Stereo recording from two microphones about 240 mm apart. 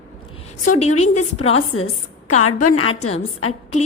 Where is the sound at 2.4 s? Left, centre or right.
Left.